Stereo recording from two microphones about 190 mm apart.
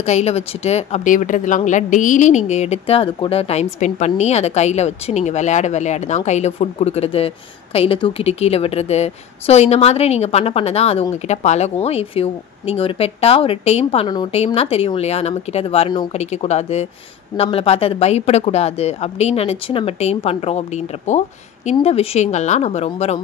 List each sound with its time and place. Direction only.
0.0 s speech: 35° left (ahead or behind)